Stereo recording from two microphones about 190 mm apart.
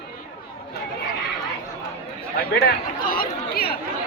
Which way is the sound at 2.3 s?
55° left (ahead or behind).